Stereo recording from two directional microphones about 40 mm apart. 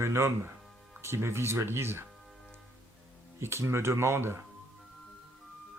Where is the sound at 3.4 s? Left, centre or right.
Right.